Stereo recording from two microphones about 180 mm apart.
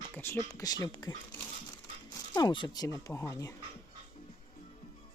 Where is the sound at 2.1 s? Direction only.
20° left (ahead or behind).